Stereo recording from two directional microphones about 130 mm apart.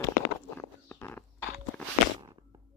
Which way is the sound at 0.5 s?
15° left (ahead or behind).